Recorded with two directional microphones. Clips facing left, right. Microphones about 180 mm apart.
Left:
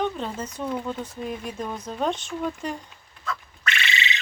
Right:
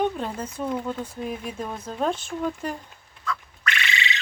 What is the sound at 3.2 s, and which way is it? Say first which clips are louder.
Duck: right 1 dB; 25° left (ahead or behind).